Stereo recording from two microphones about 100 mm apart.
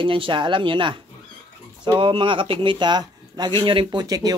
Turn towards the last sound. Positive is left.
turn(degrees=-40)  # may be behind; listen again after turning